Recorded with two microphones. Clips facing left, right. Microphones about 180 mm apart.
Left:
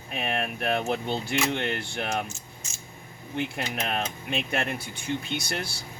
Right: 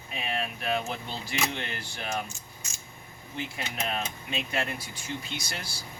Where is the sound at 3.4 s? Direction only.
60° left (ahead or behind).